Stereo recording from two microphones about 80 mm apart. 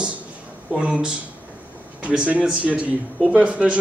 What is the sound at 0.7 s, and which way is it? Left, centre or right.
A man's voice, centre.